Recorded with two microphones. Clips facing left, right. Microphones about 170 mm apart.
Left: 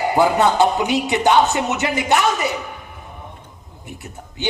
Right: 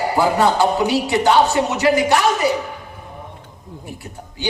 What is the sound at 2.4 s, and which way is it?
Speech, 20° left (ahead or behind).